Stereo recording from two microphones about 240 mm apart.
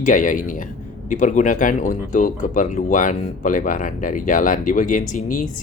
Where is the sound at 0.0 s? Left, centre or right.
Left.